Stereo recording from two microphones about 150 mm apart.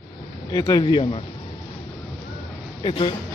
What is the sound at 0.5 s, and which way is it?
Speech, 25° left (ahead or behind).